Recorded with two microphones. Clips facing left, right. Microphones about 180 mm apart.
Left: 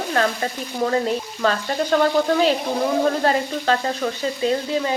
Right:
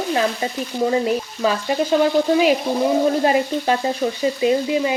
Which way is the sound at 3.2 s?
15° right (ahead or behind).